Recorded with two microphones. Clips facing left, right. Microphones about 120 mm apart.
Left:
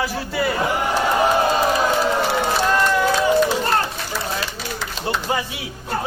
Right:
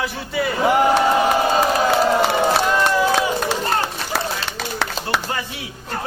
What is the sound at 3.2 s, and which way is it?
Run, 70° right (ahead or behind).